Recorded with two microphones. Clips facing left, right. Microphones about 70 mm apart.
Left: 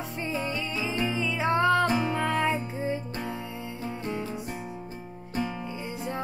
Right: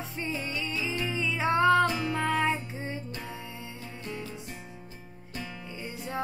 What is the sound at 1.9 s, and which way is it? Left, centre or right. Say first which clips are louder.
Music: left 4 dB; left.